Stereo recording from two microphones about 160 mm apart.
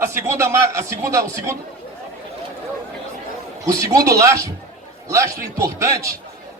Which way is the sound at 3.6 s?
20° right (ahead or behind).